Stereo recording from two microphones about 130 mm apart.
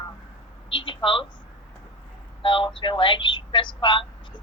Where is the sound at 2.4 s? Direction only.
40° left (ahead or behind).